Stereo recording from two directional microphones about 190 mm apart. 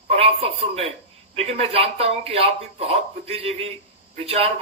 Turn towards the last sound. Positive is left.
turn(degrees=-30)  # may be behind; listen again after turning